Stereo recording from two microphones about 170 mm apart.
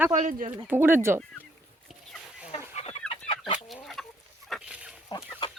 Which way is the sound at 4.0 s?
Centre (ahead or behind).